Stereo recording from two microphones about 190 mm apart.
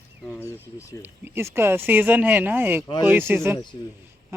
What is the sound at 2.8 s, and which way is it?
Speech, 20° left (ahead or behind).